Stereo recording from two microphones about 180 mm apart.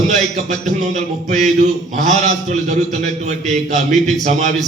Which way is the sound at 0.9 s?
40° right (ahead or behind).